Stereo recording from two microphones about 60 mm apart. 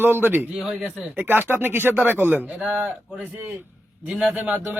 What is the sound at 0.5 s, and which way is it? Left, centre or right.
Speech, centre.